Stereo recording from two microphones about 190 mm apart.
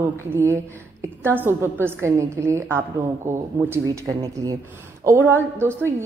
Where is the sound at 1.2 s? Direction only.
10° right (ahead or behind).